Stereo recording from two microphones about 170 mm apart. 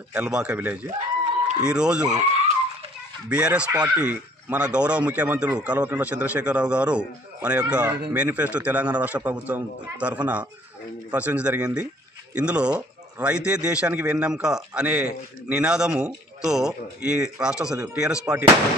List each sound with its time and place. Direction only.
0.1 s speech: 5° right (ahead or behind)
2.1 s goat: 40° right (ahead or behind)
3.3 s speech: 5° right (ahead or behind)